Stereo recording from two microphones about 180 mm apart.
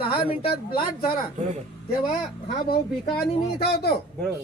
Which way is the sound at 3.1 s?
60° left (ahead or behind).